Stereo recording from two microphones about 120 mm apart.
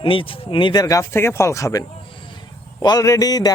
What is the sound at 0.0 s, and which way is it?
Speech, 45° left (ahead or behind).